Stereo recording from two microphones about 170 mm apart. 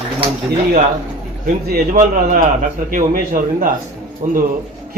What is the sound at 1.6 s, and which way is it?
Speech, 60° right (ahead or behind).